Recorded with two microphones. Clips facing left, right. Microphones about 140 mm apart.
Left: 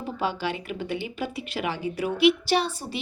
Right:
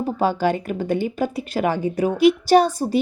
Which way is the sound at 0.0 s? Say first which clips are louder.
Right 8 dB; 45° right (ahead or behind).